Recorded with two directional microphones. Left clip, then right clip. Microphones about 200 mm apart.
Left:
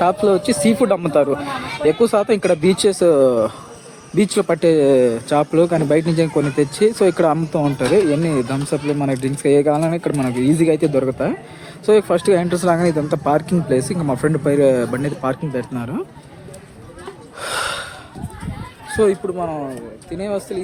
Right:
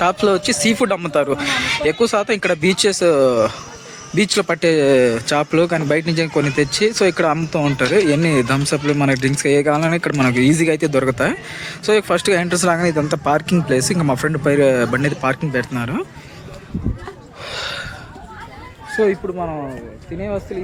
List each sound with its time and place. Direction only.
0.0 s speech: 5° left (ahead or behind)
11.6 s speech: 5° left (ahead or behind)
17.4 s gasp: 35° left (ahead or behind)
18.9 s a sound: 15° left (ahead or behind)
20.1 s speech: 10° left (ahead or behind)